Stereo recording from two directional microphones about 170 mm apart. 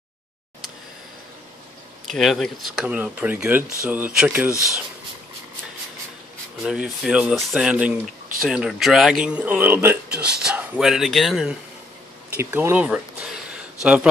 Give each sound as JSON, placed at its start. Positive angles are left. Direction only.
{"t": 2.0, "sound": "speech", "side_deg": 0}
{"t": 6.6, "sound": "speech", "side_deg": -5}
{"t": 12.4, "sound": "a sound", "side_deg": -10}